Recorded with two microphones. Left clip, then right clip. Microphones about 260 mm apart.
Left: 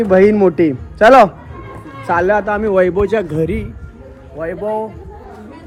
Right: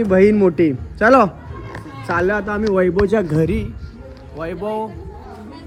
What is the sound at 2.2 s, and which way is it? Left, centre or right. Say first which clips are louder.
Speech: left 5 dB; centre.